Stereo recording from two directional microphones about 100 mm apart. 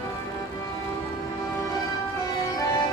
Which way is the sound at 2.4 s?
40° left (ahead or behind).